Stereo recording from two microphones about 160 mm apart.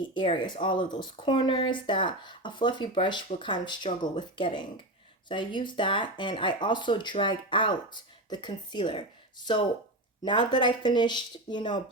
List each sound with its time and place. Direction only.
0.0 s speech: 30° left (ahead or behind)